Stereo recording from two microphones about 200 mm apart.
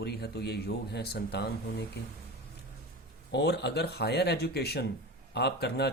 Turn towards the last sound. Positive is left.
turn(degrees=55)  # may be behind; listen again after turning